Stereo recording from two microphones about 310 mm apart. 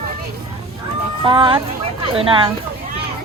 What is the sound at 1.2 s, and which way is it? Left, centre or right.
Speech, centre.